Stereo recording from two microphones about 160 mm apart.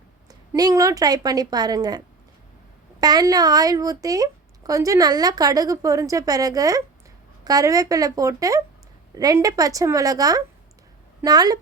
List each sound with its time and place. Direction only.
0.3 s speech: 25° right (ahead or behind)
3.0 s speech: 25° right (ahead or behind)